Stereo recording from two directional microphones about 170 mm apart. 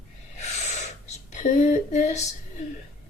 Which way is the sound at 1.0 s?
40° left (ahead or behind).